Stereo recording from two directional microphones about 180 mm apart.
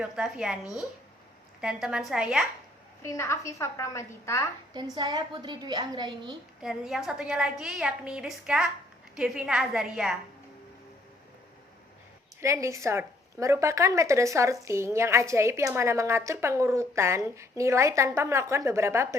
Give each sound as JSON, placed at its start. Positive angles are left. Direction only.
{"t": 0.0, "sound": "a woman's voice", "side_deg": -5}
{"t": 1.6, "sound": "a woman's voice", "side_deg": -5}
{"t": 3.0, "sound": "a woman's voice", "side_deg": 15}
{"t": 4.7, "sound": "a woman's voice", "side_deg": -25}
{"t": 6.6, "sound": "a woman's voice", "side_deg": 0}
{"t": 12.4, "sound": "a woman's voice", "side_deg": -15}